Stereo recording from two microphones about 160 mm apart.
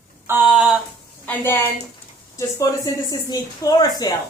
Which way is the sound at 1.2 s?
10° left (ahead or behind).